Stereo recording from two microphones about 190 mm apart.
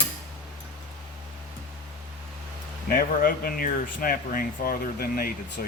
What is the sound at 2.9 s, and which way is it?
Speech, 50° left (ahead or behind).